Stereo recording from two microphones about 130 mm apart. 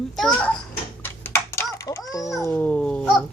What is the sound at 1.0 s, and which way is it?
Typing, 15° left (ahead or behind).